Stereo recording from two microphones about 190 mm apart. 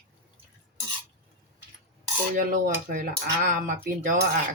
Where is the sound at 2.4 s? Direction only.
45° right (ahead or behind).